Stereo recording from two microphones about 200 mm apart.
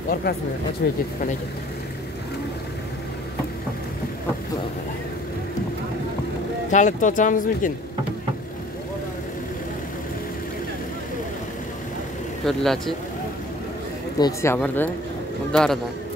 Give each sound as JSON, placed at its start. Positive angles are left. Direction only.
{"t": 0.1, "sound": "speech", "side_deg": 50}
{"t": 6.7, "sound": "speech", "side_deg": 40}
{"t": 12.4, "sound": "speech", "side_deg": 0}
{"t": 14.2, "sound": "speech", "side_deg": 15}